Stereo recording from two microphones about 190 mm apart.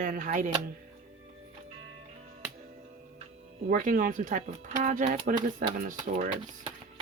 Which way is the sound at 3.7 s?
45° right (ahead or behind).